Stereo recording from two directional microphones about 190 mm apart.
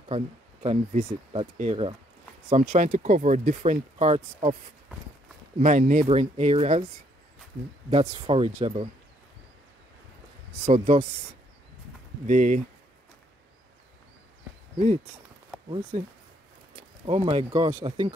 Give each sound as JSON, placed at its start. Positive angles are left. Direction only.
{"t": 0.1, "sound": "speech", "side_deg": -30}
{"t": 5.6, "sound": "speech", "side_deg": -40}
{"t": 7.9, "sound": "speech", "side_deg": -30}
{"t": 10.7, "sound": "speech", "side_deg": -35}
{"t": 12.3, "sound": "speech", "side_deg": -40}
{"t": 17.0, "sound": "speech", "side_deg": -30}